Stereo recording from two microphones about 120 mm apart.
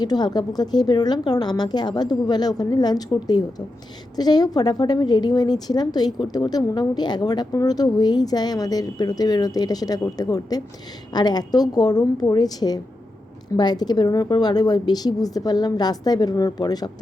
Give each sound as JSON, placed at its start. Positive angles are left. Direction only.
{"t": 0.0, "sound": "a woman's voice", "side_deg": 35}